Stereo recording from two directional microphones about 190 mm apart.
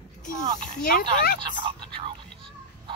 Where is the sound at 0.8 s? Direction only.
50° left (ahead or behind).